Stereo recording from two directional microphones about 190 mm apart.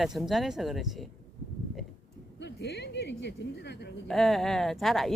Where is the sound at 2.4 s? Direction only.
60° left (ahead or behind).